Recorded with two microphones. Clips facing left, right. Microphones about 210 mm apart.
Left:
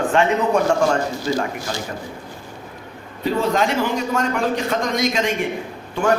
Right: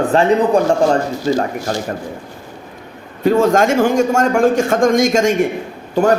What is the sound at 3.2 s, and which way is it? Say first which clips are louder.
A man's voice: right 7 dB; 50° right (ahead or behind).